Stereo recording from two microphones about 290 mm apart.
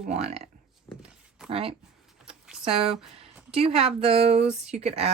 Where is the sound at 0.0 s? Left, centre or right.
Right.